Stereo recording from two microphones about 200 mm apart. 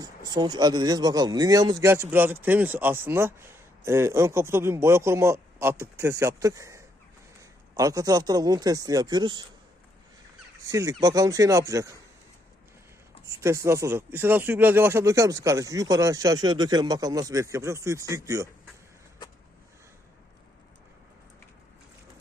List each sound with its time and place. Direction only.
0.3 s a man's voice: 20° right (ahead or behind)
10.7 s a man's voice: 15° right (ahead or behind)
13.2 s a man's voice: 15° right (ahead or behind)